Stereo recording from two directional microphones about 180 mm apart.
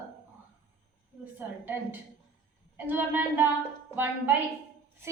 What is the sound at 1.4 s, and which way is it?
A woman's voice, 10° right (ahead or behind).